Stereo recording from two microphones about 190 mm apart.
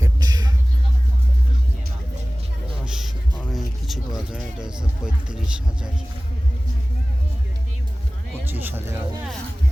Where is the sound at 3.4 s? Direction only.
Centre (ahead or behind).